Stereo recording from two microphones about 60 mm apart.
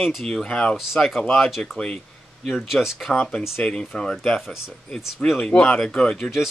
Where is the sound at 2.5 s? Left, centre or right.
Centre.